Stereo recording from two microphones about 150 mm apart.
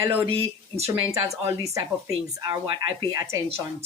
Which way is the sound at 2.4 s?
30° right (ahead or behind).